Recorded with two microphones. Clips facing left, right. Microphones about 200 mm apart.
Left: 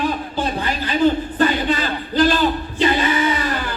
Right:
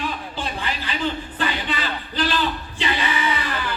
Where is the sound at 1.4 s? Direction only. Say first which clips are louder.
Left 8 dB; 45° left (ahead or behind).